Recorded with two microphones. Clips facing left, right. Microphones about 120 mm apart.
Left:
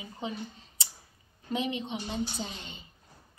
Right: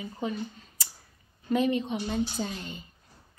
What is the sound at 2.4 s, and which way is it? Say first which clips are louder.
Speech: right 5 dB; 45° right (ahead or behind).